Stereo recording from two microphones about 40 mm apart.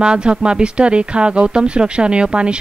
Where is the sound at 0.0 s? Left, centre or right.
Right.